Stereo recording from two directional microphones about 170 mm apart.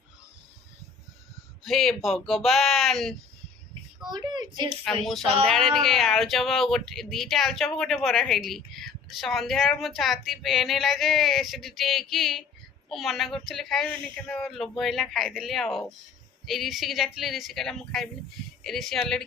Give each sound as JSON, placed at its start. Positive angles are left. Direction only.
{"t": 1.6, "sound": "speech", "side_deg": 0}
{"t": 4.1, "sound": "speech", "side_deg": -25}
{"t": 5.0, "sound": "speech", "side_deg": 0}